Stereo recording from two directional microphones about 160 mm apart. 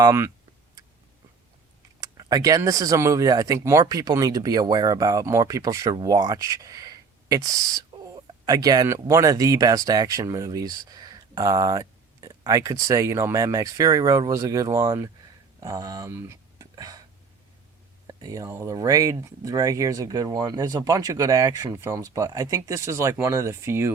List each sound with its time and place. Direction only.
0.0 s speech: 20° right (ahead or behind)
2.0 s speech: 25° right (ahead or behind)
18.0 s speech: 20° right (ahead or behind)